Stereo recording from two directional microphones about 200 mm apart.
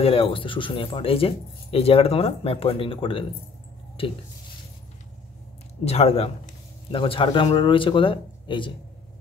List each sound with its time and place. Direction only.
0.0 s speech: 25° left (ahead or behind)
5.9 s speech: 30° left (ahead or behind)